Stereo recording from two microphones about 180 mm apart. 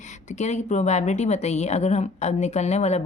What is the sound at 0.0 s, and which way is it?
A woman's voice, 40° left (ahead or behind).